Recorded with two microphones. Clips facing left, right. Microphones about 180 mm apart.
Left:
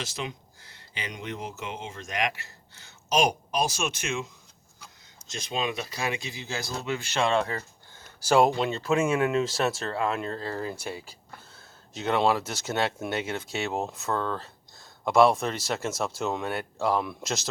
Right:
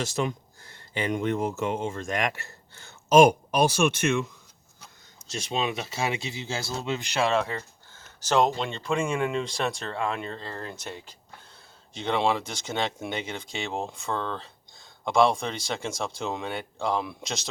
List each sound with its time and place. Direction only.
0.0 s speech: 45° right (ahead or behind)
5.3 s speech: 30° right (ahead or behind)
7.2 s speech: centre (ahead or behind)
7.9 s speech: 10° left (ahead or behind)